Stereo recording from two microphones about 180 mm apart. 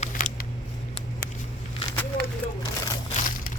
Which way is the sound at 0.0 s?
45° left (ahead or behind).